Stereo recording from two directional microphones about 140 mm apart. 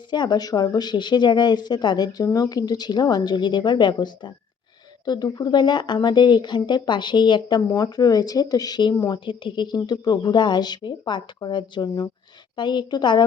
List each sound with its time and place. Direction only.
0.1 s speech: 30° left (ahead or behind)